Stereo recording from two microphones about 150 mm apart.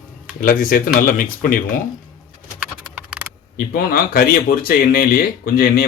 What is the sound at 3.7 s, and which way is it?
Speech, 80° left.